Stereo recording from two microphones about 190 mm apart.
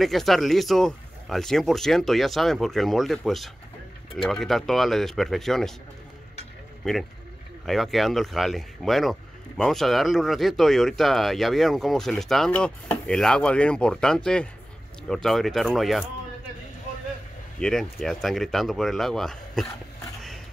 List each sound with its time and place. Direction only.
0.0 s speech: centre (ahead or behind)
6.8 s speech: centre (ahead or behind)
17.6 s speech: centre (ahead or behind)